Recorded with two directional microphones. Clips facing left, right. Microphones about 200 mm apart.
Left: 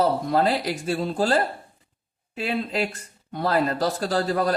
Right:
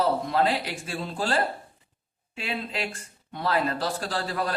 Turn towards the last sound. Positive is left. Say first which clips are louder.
# left 7 dB
turn(degrees=40)  # may be behind; listen again after turning